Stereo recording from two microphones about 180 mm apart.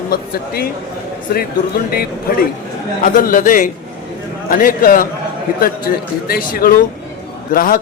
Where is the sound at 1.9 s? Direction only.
55° left (ahead or behind).